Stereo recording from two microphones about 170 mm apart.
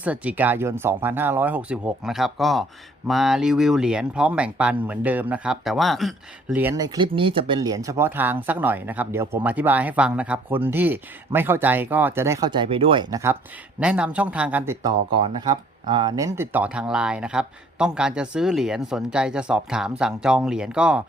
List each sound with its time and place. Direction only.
0.0 s speech: 10° right (ahead or behind)
6.6 s speech: 20° right (ahead or behind)
12.5 s speech: 30° right (ahead or behind)
13.7 s speech: 5° right (ahead or behind)
15.9 s speech: 25° right (ahead or behind); by 21.0 s 5° right (ahead or behind)